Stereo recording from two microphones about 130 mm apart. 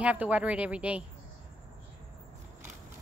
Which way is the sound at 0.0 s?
10° right (ahead or behind).